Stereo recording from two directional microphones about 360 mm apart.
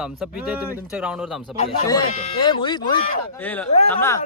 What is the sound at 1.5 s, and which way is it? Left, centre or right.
A man's voice, centre.